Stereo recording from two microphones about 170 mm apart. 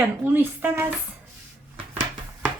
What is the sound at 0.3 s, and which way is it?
Speech, 10° right (ahead or behind).